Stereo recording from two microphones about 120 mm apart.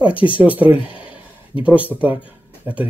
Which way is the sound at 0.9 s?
10° right (ahead or behind).